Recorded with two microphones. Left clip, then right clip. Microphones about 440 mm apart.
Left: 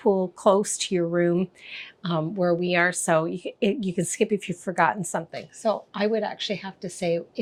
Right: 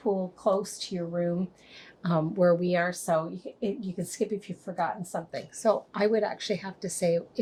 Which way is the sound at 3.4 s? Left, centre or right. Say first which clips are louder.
Left 7 dB; left.